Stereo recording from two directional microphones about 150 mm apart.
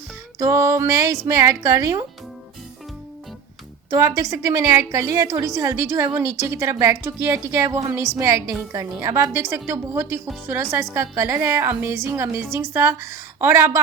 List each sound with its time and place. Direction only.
0.3 s a woman's voice: 20° right (ahead or behind)
3.8 s a woman's voice: 20° right (ahead or behind)